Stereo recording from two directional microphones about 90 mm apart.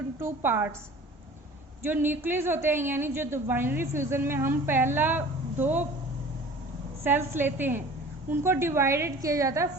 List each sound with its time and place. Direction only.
0.2 s a woman's voice: 25° right (ahead or behind)
1.8 s a woman's voice: 25° right (ahead or behind)
7.0 s a woman's voice: 25° right (ahead or behind)